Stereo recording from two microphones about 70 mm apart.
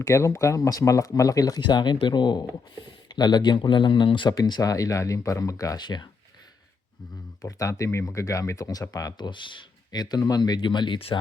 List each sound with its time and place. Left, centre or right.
0.0 s speech: left
4.6 s speech: left
7.4 s speech: left
11.1 s speech: left